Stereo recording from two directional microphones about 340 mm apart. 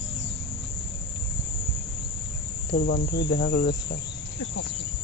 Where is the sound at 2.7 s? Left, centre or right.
Left.